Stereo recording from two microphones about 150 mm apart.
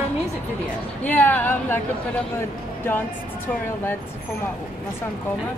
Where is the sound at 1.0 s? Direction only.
10° left (ahead or behind).